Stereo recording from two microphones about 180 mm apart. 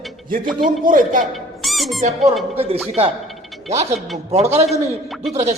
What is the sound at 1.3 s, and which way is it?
Squeak, centre (ahead or behind).